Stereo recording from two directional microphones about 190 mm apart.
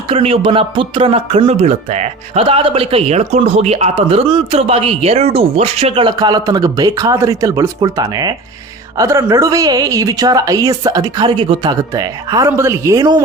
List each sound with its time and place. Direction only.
0.1 s a woman's voice: 30° right (ahead or behind)